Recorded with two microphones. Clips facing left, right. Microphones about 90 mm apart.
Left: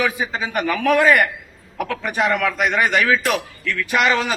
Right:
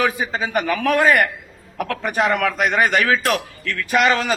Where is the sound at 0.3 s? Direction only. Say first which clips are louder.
Right 1 dB; 40° right (ahead or behind).